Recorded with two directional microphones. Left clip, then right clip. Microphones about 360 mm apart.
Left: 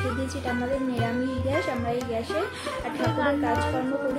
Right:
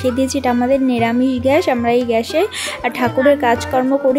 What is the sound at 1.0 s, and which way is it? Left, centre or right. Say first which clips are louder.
Speech: right 12 dB; right.